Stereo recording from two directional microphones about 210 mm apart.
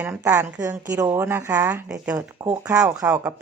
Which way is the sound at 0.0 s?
10° right (ahead or behind).